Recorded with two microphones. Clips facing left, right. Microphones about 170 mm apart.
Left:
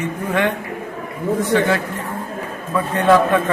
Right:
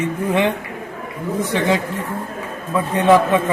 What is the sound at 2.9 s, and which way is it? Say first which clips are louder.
Speech: right 1 dB; 15° right (ahead or behind).